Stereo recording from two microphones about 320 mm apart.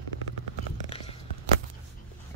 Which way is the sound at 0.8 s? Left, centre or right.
Centre.